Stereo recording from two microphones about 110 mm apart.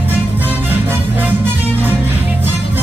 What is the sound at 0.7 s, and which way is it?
Music, 20° right (ahead or behind).